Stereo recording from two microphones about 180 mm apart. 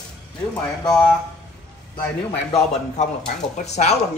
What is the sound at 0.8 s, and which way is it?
Speech, 5° left (ahead or behind).